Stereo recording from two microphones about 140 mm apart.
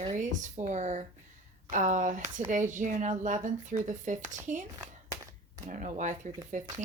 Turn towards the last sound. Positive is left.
turn(degrees=-65)  # may be behind; listen again after turning